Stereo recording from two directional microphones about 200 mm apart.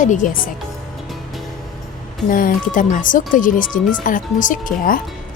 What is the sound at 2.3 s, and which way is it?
Speech, 40° left (ahead or behind).